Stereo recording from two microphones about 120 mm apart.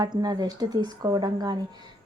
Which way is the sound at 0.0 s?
35° right (ahead or behind).